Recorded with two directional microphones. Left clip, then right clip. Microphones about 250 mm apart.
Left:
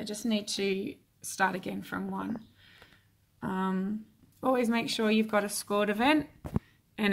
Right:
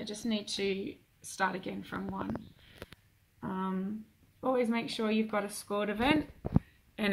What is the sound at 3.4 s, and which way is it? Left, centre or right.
Speech, left.